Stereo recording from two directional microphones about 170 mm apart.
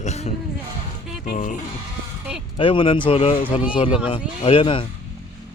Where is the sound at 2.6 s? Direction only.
30° left (ahead or behind).